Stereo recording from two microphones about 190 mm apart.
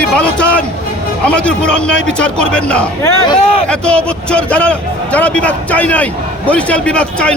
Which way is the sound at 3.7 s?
5° left (ahead or behind).